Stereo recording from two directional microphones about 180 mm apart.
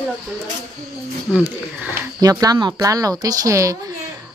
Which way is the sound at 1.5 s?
10° right (ahead or behind).